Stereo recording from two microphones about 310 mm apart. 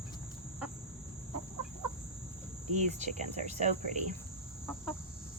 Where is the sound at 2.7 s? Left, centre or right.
Right.